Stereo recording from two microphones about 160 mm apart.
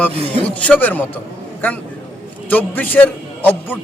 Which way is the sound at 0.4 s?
10° left (ahead or behind).